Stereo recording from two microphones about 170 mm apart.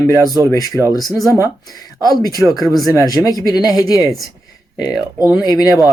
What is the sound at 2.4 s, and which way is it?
Speech, 5° right (ahead or behind).